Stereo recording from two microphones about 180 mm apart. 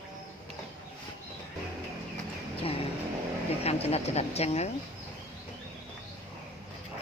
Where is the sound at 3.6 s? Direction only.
35° left (ahead or behind).